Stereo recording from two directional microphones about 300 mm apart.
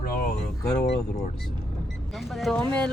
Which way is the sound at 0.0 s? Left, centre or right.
Left.